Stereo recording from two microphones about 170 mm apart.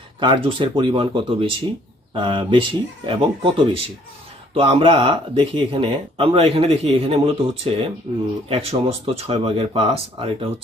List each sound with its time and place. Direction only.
0.2 s speech: 30° right (ahead or behind)